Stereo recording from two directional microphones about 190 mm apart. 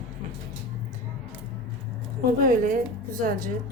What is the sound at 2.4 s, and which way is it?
Speech, 45° right (ahead or behind).